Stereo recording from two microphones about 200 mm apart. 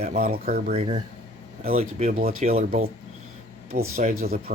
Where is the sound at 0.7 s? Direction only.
30° right (ahead or behind).